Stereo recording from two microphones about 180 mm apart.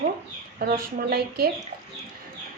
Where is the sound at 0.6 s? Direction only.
55° right (ahead or behind).